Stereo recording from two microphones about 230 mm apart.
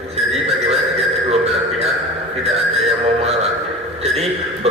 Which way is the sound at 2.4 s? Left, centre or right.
Right.